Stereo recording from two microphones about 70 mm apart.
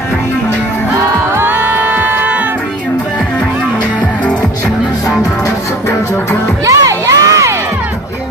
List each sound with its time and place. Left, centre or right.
1.4 s music: right
6.6 s crowd: right